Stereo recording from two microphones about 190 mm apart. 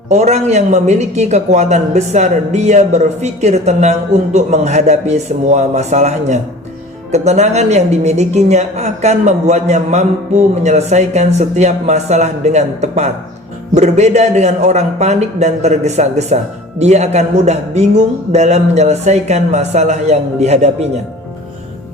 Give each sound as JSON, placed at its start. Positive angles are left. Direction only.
{"t": 0.1, "sound": "a man's voice", "side_deg": -35}